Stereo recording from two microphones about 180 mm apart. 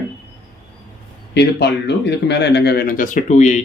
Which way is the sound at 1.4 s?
70° left (ahead or behind).